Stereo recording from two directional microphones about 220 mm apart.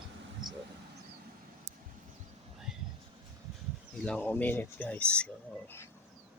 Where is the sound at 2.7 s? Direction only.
5° right (ahead or behind).